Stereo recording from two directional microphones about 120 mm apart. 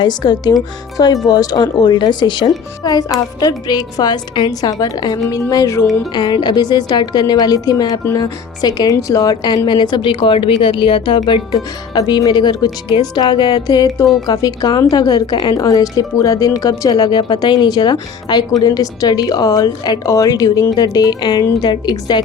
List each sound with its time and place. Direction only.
0.0 s speech: 35° left (ahead or behind)
6.1 s speech: 35° left (ahead or behind)